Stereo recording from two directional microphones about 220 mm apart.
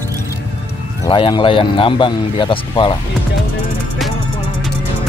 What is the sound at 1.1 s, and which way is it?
Speech, 20° left (ahead or behind).